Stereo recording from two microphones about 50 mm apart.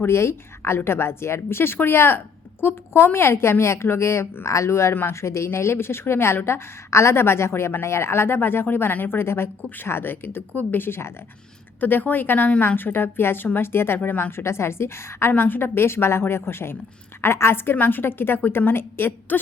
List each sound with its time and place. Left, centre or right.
0.1 s a woman's voice: left
9.6 s a woman's voice: left
9.8 s a woman's voice: left
11.8 s a woman's voice: left
15.3 s a woman's voice: left